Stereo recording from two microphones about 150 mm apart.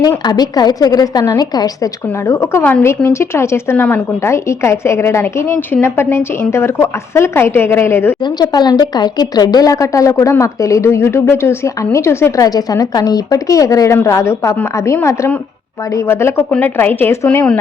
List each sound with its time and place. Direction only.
0.2 s speech: 25° left (ahead or behind)
8.2 s speech: 30° left (ahead or behind); by 17.6 s 10° left (ahead or behind)